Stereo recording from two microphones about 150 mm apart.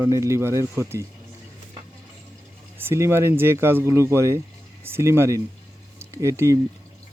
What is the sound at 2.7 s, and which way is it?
Speech, 15° right (ahead or behind).